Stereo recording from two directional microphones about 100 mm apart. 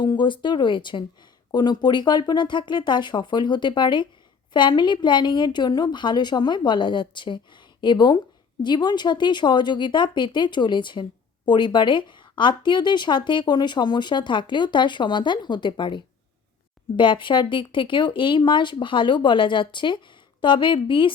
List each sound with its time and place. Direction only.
0.0 s a woman's voice: 50° left (ahead or behind)